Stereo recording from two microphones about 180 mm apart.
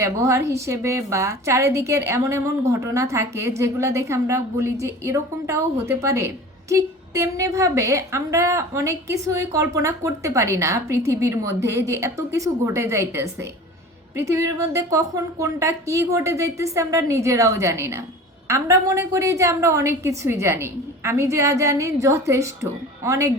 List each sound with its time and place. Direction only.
0.0 s a woman's voice: 15° right (ahead or behind)